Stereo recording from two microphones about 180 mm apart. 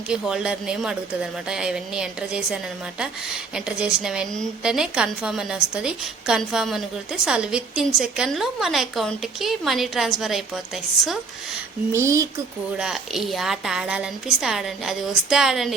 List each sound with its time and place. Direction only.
0.1 s a woman's voice: 5° right (ahead or behind)
11.9 s speech: 15° right (ahead or behind)
12.7 s a woman's voice: 5° right (ahead or behind)